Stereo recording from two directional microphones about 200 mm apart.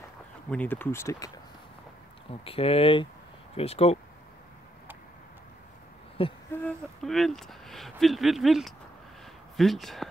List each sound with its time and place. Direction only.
0.5 s speech: 10° left (ahead or behind)
2.4 s speech: 30° left (ahead or behind)
6.2 s speech: 30° left (ahead or behind)
6.5 s speech: 5° left (ahead or behind)